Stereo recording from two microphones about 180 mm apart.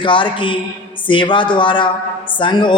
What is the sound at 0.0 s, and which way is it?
A man's voice, 30° left (ahead or behind).